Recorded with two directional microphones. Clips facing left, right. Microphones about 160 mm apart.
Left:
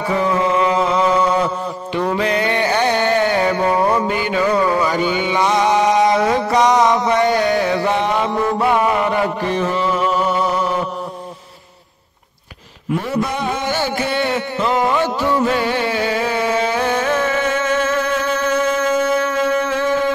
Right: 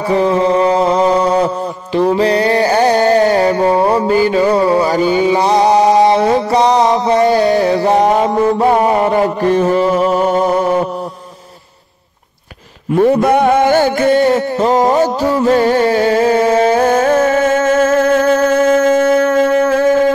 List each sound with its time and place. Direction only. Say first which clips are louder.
0.1 s music: right 6 dB; 35° right (ahead or behind)
2.1 s a sound: right 6 dB; 35° right (ahead or behind)
13.0 s music: right 14 dB; 55° right (ahead or behind)